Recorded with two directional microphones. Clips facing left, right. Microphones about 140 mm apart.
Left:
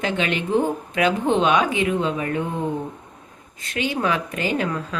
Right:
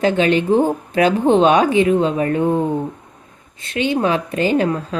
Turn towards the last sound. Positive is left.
turn(degrees=-30)  # may be behind; listen again after turning